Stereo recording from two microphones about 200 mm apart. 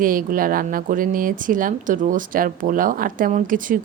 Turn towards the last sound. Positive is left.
turn(degrees=-40)  # may be behind; listen again after turning